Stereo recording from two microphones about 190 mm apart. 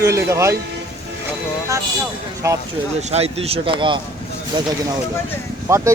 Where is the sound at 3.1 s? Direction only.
35° right (ahead or behind).